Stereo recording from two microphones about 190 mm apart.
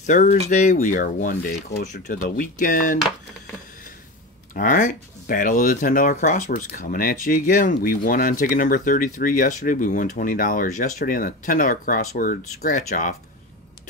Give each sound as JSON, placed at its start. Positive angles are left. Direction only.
{"t": 0.0, "sound": "speech", "side_deg": 40}
{"t": 4.6, "sound": "speech", "side_deg": 45}